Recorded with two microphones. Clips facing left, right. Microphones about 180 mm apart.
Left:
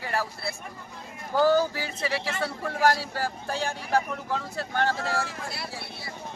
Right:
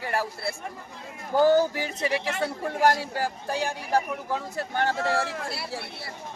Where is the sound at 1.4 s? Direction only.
15° right (ahead or behind).